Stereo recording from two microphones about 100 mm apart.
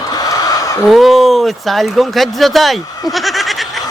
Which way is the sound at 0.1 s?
40° left (ahead or behind).